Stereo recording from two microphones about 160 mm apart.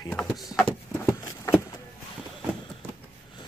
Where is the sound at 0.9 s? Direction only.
15° left (ahead or behind).